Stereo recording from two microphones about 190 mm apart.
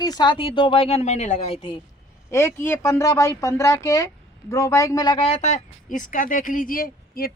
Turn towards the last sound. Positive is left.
turn(degrees=50)  # may be behind; listen again after turning